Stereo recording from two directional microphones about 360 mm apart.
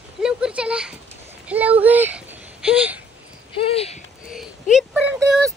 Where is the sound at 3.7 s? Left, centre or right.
Centre.